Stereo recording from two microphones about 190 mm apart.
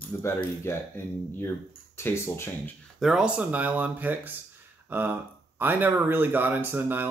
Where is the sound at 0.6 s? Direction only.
10° left (ahead or behind).